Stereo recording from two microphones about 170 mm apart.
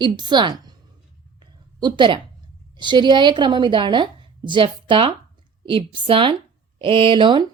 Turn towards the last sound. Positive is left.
turn(degrees=-30)  # may be behind; listen again after turning